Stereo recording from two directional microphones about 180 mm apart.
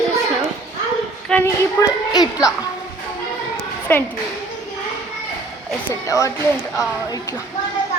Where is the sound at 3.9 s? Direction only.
10° left (ahead or behind).